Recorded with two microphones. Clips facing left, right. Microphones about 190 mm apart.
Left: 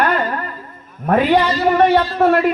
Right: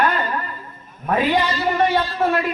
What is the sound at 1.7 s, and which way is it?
Speech, 65° left (ahead or behind).